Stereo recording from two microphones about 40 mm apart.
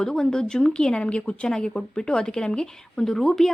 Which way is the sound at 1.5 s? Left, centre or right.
Centre.